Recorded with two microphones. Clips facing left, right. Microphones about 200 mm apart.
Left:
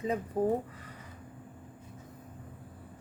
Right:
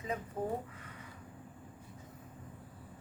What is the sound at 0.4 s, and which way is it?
Speech, 35° left (ahead or behind).